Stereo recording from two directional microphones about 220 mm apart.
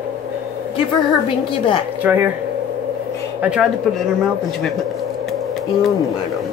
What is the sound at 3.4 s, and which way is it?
Speech, 5° right (ahead or behind).